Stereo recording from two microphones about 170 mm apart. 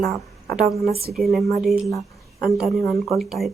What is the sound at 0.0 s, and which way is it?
A woman's voice, centre (ahead or behind).